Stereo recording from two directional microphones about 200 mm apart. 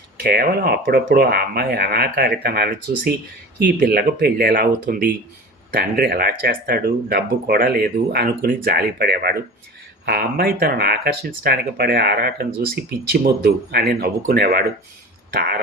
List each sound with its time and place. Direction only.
0.2 s speech: 55° right (ahead or behind)